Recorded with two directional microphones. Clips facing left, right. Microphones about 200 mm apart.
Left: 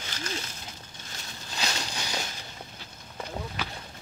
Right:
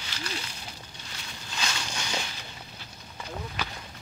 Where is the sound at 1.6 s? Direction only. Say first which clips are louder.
Left 1 dB; 35° left (ahead or behind).